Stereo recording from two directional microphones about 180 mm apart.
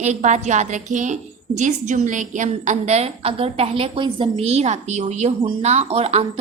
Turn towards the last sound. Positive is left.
turn(degrees=-35)  # may be behind; listen again after turning